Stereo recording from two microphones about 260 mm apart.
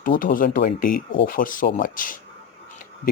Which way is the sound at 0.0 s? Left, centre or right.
Left.